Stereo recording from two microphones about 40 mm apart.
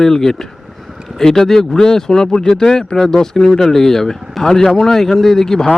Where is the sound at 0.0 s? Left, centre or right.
Centre.